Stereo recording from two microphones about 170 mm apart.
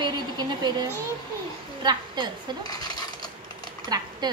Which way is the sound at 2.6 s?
20° left (ahead or behind).